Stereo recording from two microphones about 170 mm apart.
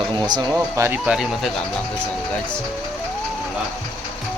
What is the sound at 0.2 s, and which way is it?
Speech, 25° right (ahead or behind).